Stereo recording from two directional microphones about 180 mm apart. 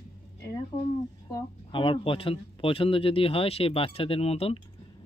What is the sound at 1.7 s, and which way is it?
A man's voice, 30° left (ahead or behind).